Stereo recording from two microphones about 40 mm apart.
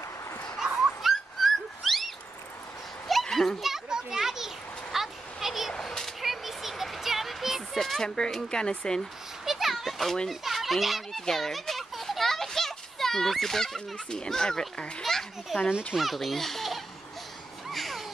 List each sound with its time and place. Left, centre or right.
1.0 s dog: centre
3.1 s children playing: centre
3.6 s children playing: centre
4.9 s a sound: centre
5.7 s children playing: centre
6.2 s a sound: centre
8.4 s speech: centre
9.4 s children playing: centre
10.4 s a child's voice: centre
11.2 s children playing: centre
13.9 s speech: left
14.3 s a child's voice: centre
17.6 s a sound: centre